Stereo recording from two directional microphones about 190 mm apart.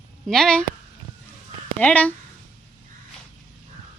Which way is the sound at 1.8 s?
10° left (ahead or behind).